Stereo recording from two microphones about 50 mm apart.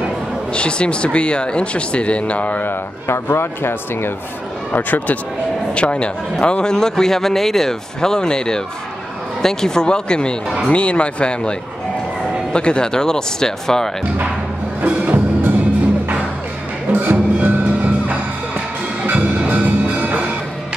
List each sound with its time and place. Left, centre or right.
0.5 s speech: left
3.1 s speech: left
4.7 s speech: left
5.8 s speech: left
12.5 s speech: centre
14.8 s music: right
16.9 s music: right